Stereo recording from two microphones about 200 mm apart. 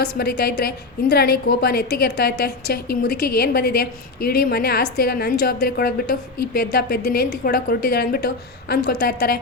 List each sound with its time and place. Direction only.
0.0 s a woman's voice: 55° left (ahead or behind)